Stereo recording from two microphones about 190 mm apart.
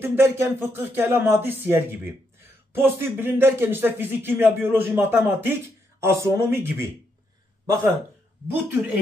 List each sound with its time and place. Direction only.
0.0 s a man's voice: 10° right (ahead or behind)